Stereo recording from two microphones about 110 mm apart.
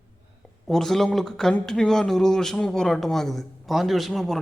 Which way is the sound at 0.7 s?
5° left (ahead or behind).